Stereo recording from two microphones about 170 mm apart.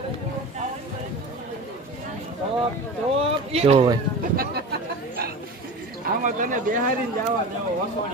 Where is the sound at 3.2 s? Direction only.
35° right (ahead or behind).